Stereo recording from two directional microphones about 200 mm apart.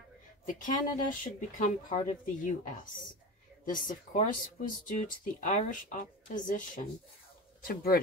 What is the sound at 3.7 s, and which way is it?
Speech, 40° left (ahead or behind).